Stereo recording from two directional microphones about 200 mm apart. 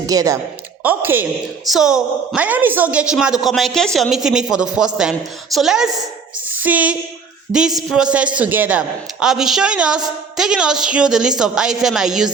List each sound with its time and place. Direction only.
0.1 s a man's voice: 20° right (ahead or behind); by 6.0 s centre (ahead or behind)
6.5 s a sound: 10° right (ahead or behind)
7.5 s a woman's voice: 5° right (ahead or behind)